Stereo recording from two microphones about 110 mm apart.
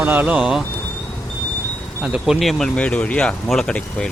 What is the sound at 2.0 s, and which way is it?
Speech, 5° right (ahead or behind).